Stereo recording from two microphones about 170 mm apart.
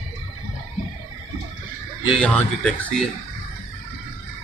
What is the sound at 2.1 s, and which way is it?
Speech, 5° left (ahead or behind).